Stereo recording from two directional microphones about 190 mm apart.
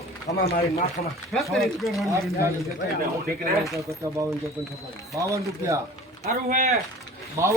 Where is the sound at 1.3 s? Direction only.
Centre (ahead or behind).